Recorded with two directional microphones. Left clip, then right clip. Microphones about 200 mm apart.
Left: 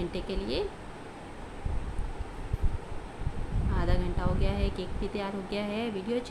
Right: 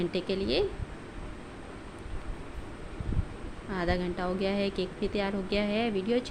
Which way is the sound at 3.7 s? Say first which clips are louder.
Right 3 dB; 15° right (ahead or behind).